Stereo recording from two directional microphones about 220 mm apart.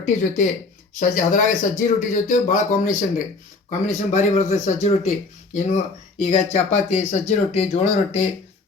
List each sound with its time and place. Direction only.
0.0 s speech: 35° left (ahead or behind)